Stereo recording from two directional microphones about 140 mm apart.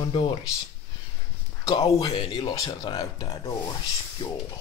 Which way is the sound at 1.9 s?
35° left (ahead or behind).